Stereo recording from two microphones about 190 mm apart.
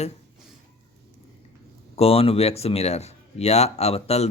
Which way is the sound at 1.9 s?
30° left (ahead or behind).